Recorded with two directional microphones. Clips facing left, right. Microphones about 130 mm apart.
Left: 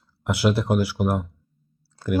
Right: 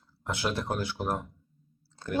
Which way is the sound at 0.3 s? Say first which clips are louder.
Left 9 dB; 10° left (ahead or behind).